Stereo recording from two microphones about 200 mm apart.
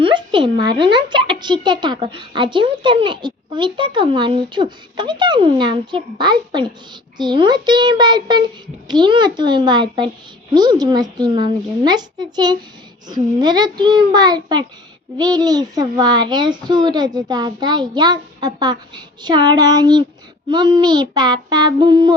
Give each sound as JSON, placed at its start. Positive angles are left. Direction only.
{"t": 0.0, "sound": "speech", "side_deg": -25}